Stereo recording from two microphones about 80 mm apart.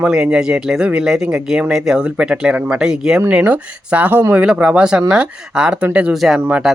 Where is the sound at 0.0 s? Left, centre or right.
Centre.